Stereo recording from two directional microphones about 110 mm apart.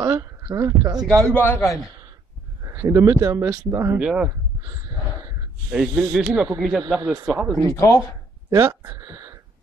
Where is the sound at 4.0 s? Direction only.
5° right (ahead or behind).